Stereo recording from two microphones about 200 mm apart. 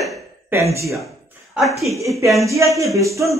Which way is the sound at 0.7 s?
15° right (ahead or behind).